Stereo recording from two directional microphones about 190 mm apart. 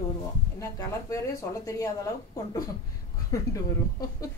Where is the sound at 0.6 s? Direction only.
15° left (ahead or behind).